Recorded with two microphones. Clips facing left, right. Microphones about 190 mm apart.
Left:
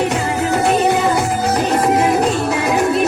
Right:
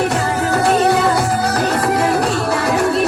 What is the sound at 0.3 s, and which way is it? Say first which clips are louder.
Music: even; 20° left (ahead or behind).